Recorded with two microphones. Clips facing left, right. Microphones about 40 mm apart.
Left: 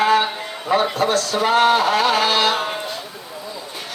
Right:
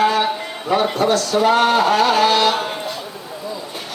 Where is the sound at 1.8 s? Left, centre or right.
Centre.